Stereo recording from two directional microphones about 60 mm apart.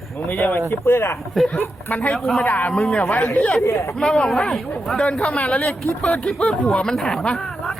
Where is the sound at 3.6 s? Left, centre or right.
Left.